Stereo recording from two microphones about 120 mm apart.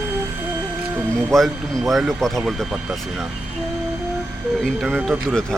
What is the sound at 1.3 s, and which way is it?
Speech, centre (ahead or behind).